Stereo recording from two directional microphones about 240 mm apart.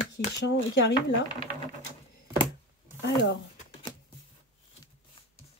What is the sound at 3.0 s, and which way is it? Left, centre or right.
Speech, left.